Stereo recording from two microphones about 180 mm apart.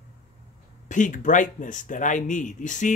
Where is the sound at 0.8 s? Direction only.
45° left (ahead or behind).